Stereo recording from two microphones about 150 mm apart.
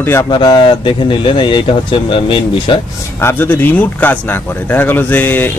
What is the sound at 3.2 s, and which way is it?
Speech, 15° left (ahead or behind).